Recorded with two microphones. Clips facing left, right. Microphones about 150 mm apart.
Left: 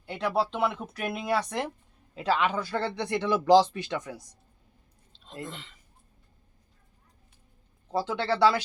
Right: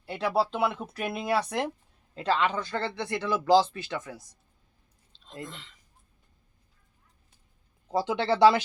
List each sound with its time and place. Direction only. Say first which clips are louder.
0.0 s speech: right 1 dB; 5° right (ahead or behind)
2.1 s speech: even; 5° left (ahead or behind)
5.2 s speech: left 2 dB; 5° left (ahead or behind)
7.9 s speech: right 2 dB; 15° right (ahead or behind)